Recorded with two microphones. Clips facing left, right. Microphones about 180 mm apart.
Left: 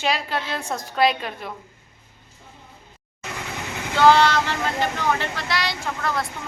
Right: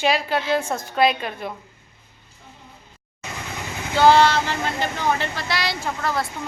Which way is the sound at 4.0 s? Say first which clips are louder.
Right 1 dB; 30° right (ahead or behind).